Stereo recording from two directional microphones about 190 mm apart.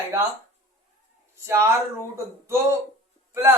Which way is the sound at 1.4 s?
15° right (ahead or behind).